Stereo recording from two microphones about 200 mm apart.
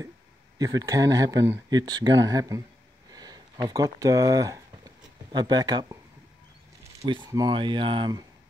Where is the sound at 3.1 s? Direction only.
20° right (ahead or behind).